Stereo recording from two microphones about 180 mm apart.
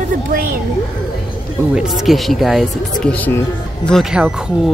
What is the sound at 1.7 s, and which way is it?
Speech, centre (ahead or behind).